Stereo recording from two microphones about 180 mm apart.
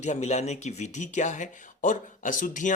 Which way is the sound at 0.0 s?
40° left (ahead or behind).